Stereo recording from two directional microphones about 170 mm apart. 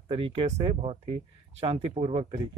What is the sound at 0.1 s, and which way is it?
Speech, 30° right (ahead or behind).